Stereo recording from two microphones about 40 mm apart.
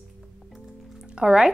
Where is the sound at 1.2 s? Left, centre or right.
Right.